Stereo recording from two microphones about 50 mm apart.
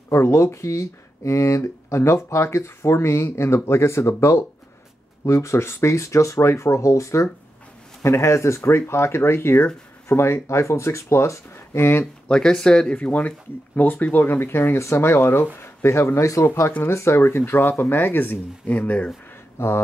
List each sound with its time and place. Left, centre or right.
0.1 s speech: left
1.6 s speech: left
8.0 s speech: left
12.3 s speech: centre
12.9 s speech: left
16.8 s speech: left
18.8 s speech: left